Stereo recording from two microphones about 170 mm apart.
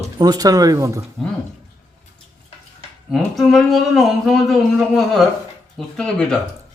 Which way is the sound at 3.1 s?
Centre (ahead or behind).